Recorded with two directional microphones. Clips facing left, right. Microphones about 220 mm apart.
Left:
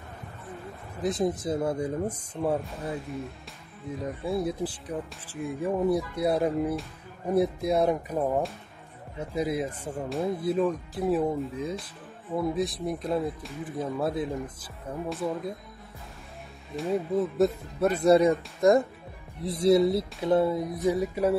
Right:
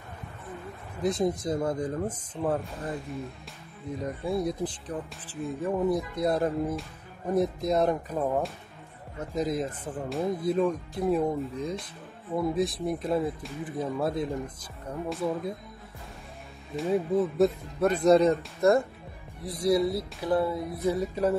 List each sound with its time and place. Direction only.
1.0 s speech: centre (ahead or behind)
3.1 s speech: centre (ahead or behind)
16.7 s speech: centre (ahead or behind)